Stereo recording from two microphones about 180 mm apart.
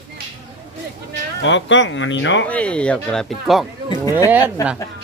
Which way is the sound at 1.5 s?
90° left.